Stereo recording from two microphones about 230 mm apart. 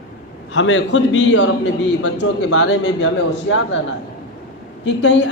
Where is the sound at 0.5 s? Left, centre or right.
Left.